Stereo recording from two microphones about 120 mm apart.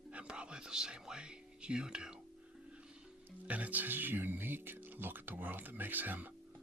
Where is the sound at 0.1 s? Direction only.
10° right (ahead or behind).